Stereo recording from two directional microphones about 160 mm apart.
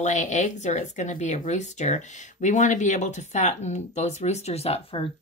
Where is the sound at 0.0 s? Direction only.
50° left (ahead or behind).